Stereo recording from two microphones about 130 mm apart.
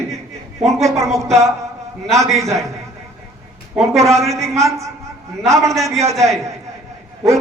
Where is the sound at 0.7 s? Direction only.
25° right (ahead or behind).